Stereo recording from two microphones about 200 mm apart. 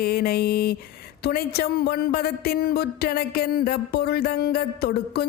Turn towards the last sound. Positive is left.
turn(degrees=50)  # may be behind; listen again after turning